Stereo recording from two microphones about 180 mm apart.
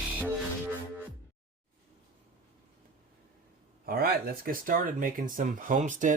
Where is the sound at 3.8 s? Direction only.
55° right (ahead or behind).